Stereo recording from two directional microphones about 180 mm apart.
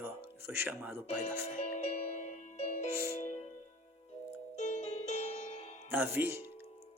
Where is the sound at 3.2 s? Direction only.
40° left (ahead or behind).